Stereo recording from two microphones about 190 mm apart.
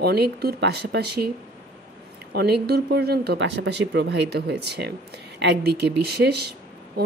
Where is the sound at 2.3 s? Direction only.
55° right (ahead or behind).